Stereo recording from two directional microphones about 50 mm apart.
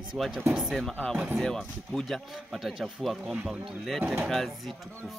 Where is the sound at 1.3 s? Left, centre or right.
Centre.